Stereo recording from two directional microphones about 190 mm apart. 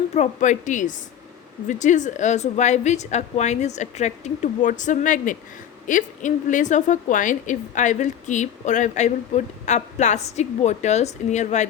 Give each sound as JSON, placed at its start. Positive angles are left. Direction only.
{"t": 0.1, "sound": "a woman's voice", "side_deg": 40}